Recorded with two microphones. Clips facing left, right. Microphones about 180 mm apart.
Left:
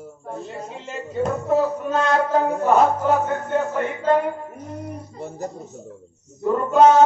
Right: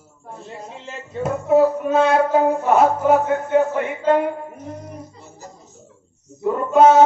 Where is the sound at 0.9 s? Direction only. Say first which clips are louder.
Left 1 dB; 5° right (ahead or behind).